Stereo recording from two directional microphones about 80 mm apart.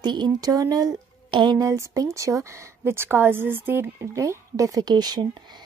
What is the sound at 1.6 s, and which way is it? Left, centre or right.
A woman's voice, right.